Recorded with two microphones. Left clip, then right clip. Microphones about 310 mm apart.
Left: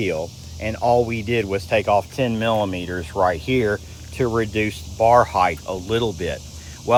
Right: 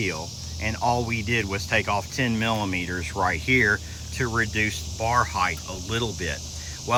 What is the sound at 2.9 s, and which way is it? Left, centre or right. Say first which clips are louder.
Speech: left 5 dB; centre.